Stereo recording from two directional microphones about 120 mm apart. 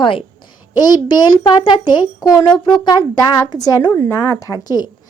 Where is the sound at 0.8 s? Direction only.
35° left (ahead or behind).